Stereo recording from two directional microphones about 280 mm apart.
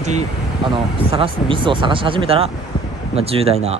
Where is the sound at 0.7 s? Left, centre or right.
Centre.